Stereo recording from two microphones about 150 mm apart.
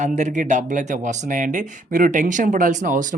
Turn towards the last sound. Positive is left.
turn(degrees=-60)  # may be behind; listen again after turning